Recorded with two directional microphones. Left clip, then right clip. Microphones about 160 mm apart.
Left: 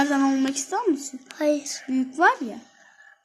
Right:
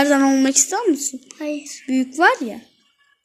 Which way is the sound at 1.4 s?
45° left (ahead or behind).